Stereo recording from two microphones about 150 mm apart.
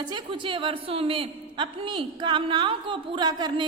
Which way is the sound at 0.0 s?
30° right (ahead or behind).